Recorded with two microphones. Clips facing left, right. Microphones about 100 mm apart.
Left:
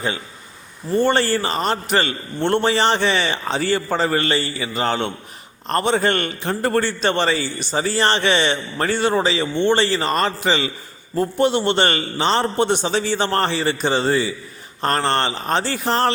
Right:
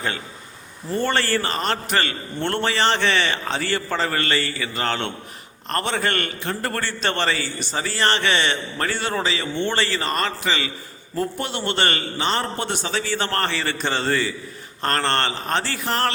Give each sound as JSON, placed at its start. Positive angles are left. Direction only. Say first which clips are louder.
{"t": 0.9, "sound": "a man's voice", "louder": "left 4 dB", "side_deg": 20}